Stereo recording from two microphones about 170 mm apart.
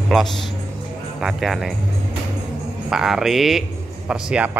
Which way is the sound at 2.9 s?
Centre (ahead or behind).